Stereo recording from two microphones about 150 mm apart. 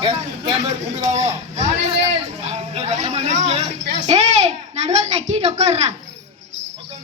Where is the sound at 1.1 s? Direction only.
50° right (ahead or behind).